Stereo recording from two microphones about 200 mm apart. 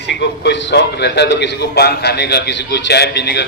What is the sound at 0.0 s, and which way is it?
A man's voice, 60° left (ahead or behind).